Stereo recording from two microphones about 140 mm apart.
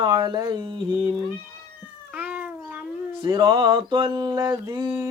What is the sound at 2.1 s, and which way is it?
Cat, 10° right (ahead or behind).